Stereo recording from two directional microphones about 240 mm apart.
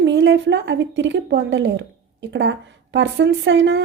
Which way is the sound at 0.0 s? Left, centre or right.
Right.